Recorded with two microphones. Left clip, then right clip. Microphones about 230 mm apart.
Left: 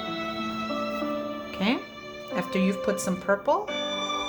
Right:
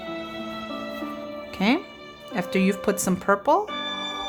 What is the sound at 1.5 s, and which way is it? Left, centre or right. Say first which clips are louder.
Speech: right 5 dB; right.